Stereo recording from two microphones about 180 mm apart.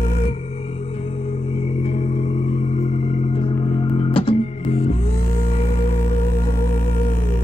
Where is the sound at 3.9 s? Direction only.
30° left (ahead or behind).